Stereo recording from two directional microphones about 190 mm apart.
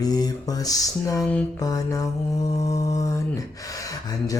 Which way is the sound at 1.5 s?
20° left (ahead or behind).